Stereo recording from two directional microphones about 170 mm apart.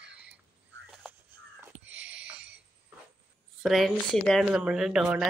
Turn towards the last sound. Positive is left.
turn(degrees=0)  # may be behind; listen again after turning